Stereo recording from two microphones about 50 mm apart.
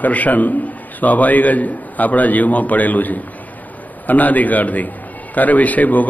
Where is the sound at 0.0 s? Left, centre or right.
Left.